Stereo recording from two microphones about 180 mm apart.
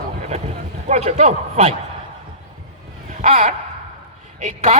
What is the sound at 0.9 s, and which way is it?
Speech, 35° right (ahead or behind).